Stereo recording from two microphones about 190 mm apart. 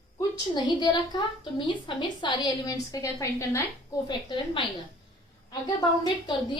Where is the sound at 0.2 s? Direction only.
20° left (ahead or behind).